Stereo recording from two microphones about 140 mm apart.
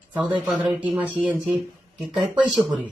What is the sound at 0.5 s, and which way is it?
Speech, 10° right (ahead or behind).